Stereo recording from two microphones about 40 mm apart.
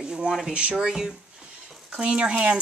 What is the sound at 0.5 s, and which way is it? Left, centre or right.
Speech, right.